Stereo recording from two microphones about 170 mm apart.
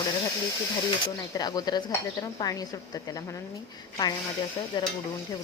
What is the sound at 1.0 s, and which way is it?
Speech, 20° left (ahead or behind).